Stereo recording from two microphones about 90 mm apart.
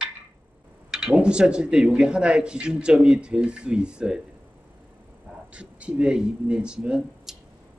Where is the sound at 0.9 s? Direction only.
10° right (ahead or behind).